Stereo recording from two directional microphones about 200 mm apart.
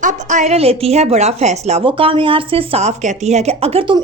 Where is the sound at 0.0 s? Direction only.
40° right (ahead or behind).